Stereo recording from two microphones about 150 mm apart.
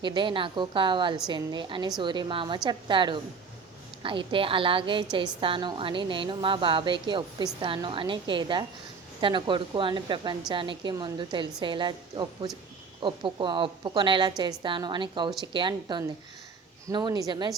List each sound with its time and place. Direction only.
0.0 s a woman's voice: 30° right (ahead or behind)